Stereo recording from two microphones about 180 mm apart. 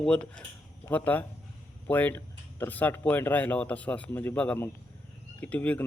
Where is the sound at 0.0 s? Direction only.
5° left (ahead or behind).